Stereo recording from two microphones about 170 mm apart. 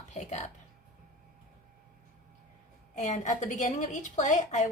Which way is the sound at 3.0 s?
45° left (ahead or behind).